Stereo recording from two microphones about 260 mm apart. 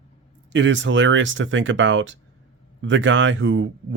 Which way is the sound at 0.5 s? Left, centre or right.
Right.